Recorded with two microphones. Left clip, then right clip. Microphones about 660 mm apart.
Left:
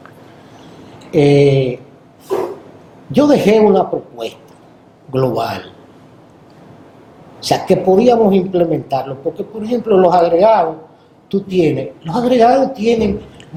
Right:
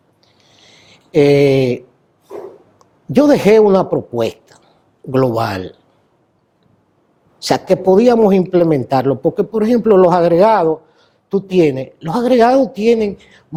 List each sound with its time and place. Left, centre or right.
1.1 s a sound: right
3.1 s speech: right
7.3 s speech: right